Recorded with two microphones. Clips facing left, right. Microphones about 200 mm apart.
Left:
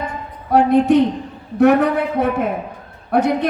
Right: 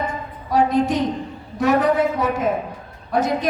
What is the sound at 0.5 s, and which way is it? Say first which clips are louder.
A woman's voice: left 6 dB; 60° left (ahead or behind).